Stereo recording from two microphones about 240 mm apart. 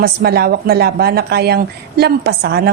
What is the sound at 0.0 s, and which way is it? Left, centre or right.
A woman's voice, right.